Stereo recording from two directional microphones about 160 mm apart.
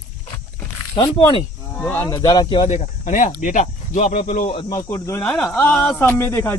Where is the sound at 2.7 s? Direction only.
50° left (ahead or behind).